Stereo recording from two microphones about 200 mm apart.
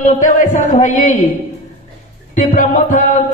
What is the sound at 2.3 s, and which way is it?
Speech, 40° left (ahead or behind).